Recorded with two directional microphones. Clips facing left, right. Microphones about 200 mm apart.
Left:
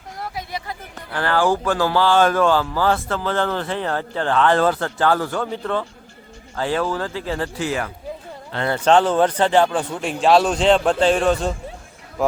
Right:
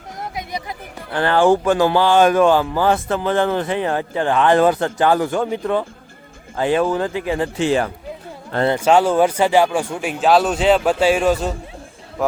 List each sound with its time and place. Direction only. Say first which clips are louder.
0.2 s speech: right 2 dB; 20° right (ahead or behind)
8.7 s speech: even; 10° right (ahead or behind)